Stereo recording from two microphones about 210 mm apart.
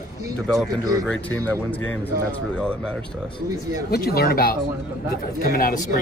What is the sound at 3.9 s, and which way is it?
Speech, 50° left (ahead or behind).